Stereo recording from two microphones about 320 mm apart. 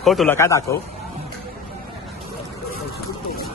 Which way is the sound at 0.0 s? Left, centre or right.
Centre.